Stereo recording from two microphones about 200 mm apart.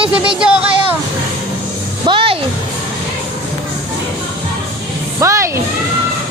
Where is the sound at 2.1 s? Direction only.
25° right (ahead or behind).